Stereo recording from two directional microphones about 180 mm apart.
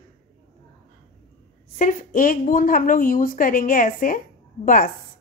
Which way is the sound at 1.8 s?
50° left (ahead or behind).